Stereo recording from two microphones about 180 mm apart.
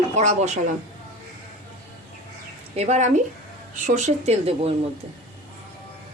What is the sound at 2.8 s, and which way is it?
Speech, 40° right (ahead or behind).